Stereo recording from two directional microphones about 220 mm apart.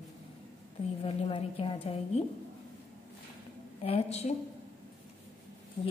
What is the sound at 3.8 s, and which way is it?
Speech, 30° left (ahead or behind).